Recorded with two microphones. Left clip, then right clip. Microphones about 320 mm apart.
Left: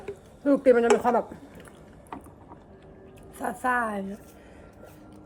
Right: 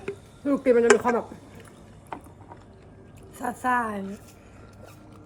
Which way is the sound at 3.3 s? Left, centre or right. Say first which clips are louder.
Right 1 dB; centre.